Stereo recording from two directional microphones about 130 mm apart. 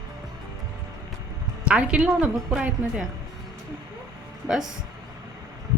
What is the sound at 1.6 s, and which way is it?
A woman's voice, 10° right (ahead or behind).